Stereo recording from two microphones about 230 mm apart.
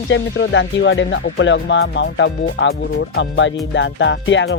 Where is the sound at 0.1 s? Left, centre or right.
Left.